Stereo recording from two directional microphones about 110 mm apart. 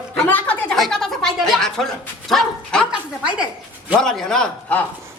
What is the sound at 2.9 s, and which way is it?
Speech, 10° right (ahead or behind).